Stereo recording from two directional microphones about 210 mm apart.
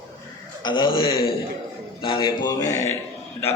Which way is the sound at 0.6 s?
20° left (ahead or behind).